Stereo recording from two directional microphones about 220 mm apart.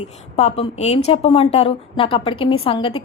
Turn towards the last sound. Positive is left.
turn(degrees=25)  # may be behind; listen again after turning